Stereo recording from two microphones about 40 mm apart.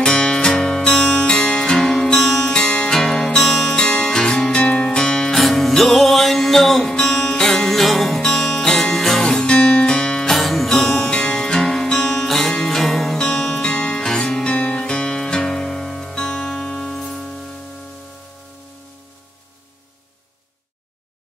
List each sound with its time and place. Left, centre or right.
0.0 s music: centre
10.3 s music: centre
10.7 s music: centre
13.7 s music: left
14.5 s music: left; by 17.3 s centre